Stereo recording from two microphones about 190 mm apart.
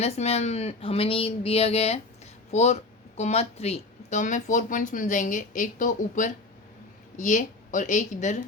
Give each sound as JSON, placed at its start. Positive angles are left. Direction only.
{"t": 0.0, "sound": "speech", "side_deg": 35}